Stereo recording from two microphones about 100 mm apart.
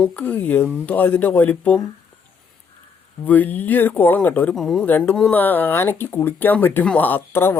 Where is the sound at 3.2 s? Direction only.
15° left (ahead or behind).